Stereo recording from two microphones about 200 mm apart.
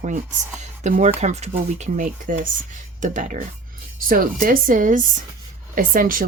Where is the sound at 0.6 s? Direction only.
35° right (ahead or behind).